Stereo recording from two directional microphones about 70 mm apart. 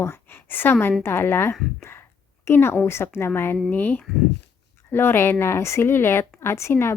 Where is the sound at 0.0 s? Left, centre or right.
Left.